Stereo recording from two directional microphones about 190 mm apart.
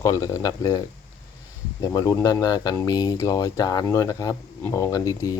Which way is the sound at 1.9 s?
20° left (ahead or behind).